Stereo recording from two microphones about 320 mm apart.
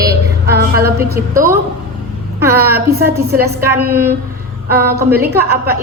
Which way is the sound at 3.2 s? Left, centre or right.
Right.